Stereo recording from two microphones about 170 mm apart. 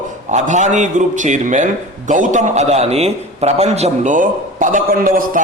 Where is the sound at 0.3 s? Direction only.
45° right (ahead or behind).